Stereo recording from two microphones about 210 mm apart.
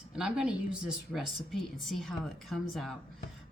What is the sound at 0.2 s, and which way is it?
A woman's voice, 5° right (ahead or behind).